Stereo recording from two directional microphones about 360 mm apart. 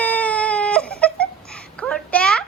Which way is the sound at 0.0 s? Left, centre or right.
Centre.